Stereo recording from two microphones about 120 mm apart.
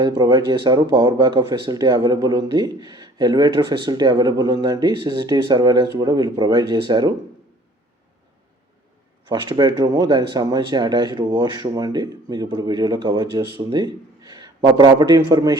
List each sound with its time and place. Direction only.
0.0 s speech: 35° right (ahead or behind)
9.3 s a man's voice: 35° right (ahead or behind)